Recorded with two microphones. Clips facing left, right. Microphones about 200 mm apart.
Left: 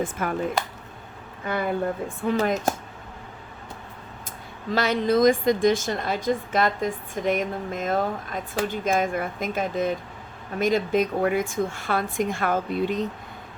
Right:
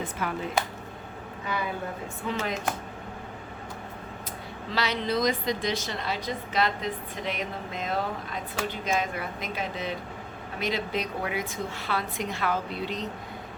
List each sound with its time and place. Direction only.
0.0 s a woman's voice: 50° left (ahead or behind)
2.4 s a woman's voice: 45° left (ahead or behind)
4.7 s a woman's voice: 50° left (ahead or behind)